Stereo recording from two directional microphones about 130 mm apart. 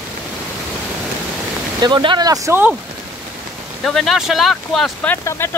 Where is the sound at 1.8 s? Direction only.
40° right (ahead or behind).